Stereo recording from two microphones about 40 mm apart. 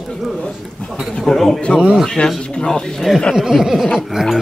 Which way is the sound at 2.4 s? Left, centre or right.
Left.